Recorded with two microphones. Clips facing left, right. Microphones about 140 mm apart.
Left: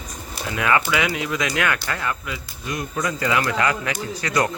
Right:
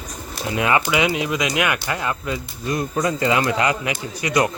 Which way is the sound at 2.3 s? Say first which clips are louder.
Right 6 dB; 35° right (ahead or behind).